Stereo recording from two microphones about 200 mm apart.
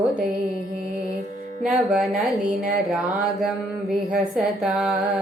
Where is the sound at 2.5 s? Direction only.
40° right (ahead or behind).